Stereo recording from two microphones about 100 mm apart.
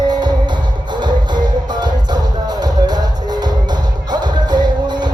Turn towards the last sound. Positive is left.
turn(degrees=-45)  # may be behind; listen again after turning